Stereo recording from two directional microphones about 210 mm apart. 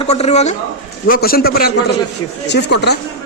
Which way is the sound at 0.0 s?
30° left (ahead or behind).